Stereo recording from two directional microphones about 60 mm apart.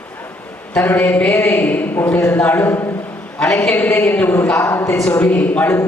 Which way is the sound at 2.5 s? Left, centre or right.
Left.